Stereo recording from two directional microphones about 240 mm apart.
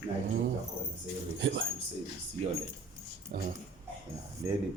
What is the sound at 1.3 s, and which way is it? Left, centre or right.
Speech, right.